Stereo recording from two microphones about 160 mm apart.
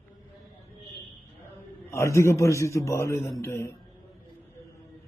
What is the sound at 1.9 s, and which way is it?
A man's voice, 15° left (ahead or behind).